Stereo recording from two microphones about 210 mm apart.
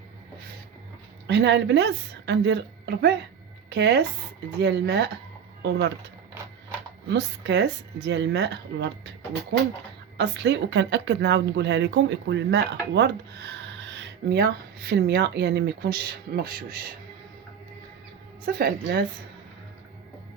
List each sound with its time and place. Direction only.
1.3 s a woman's voice: 55° right (ahead or behind)
7.1 s a woman's voice: 55° right (ahead or behind)
10.2 s a woman's voice: 55° right (ahead or behind)
18.4 s a woman's voice: 45° right (ahead or behind)